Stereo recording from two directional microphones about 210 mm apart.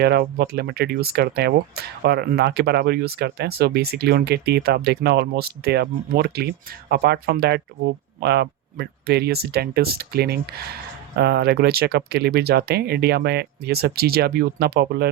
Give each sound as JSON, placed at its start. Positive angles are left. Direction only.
{"t": 0.0, "sound": "speech", "side_deg": -50}